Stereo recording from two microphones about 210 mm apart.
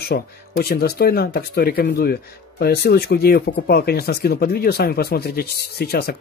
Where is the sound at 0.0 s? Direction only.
50° left (ahead or behind).